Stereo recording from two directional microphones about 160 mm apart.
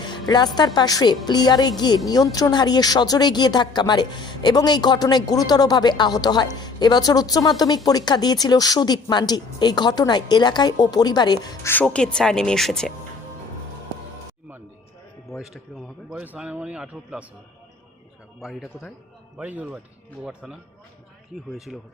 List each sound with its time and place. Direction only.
0.0 s speech: 25° left (ahead or behind)
11.7 s a woman's voice: 10° left (ahead or behind)
15.3 s a man's voice: centre (ahead or behind)
18.3 s a woman's voice: centre (ahead or behind)